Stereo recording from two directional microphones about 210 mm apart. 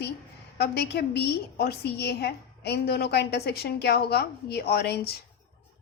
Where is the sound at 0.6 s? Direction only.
50° left (ahead or behind).